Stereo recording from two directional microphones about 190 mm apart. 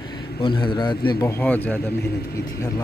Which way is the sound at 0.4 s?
25° left (ahead or behind).